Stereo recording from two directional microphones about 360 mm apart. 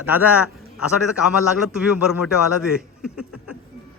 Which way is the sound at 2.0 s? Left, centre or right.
Centre.